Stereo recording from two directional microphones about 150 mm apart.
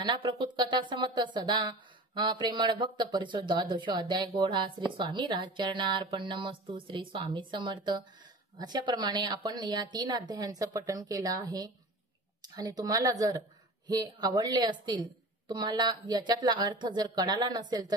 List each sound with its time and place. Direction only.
0.0 s a woman's voice: 30° right (ahead or behind)